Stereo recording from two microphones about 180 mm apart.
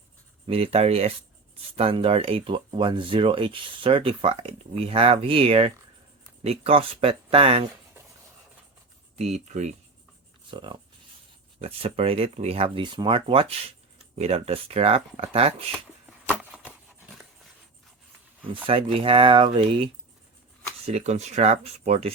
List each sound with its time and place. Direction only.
0.4 s speech: 35° right (ahead or behind)
9.1 s speech: 40° right (ahead or behind)
11.6 s speech: 35° right (ahead or behind)
16.4 s a sound: 5° right (ahead or behind)
18.6 s speech: 30° right (ahead or behind)